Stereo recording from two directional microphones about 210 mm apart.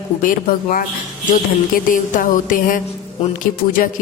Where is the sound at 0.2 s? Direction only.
40° left (ahead or behind).